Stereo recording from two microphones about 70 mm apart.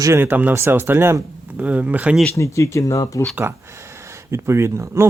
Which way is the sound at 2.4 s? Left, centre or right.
Left.